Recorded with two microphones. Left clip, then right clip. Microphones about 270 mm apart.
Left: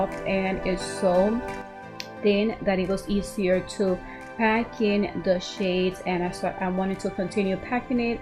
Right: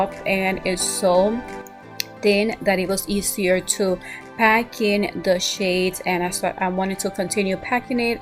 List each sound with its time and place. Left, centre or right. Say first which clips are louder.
0.0 s music: right 5 dB; centre